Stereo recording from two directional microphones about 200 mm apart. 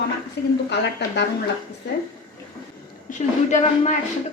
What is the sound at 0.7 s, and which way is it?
Speech, 60° left (ahead or behind).